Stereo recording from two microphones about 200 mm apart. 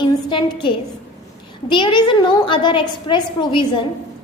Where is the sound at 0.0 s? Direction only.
25° left (ahead or behind).